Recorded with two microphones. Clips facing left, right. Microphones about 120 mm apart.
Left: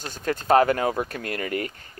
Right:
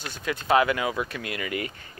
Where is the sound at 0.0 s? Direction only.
45° left (ahead or behind).